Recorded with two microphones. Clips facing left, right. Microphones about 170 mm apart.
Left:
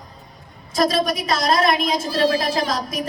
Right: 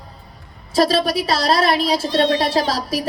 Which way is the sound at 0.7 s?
30° right (ahead or behind).